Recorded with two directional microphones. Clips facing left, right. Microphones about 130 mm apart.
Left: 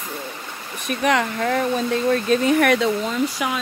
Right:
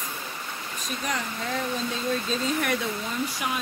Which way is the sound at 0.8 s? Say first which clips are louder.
Left 12 dB; 70° left (ahead or behind).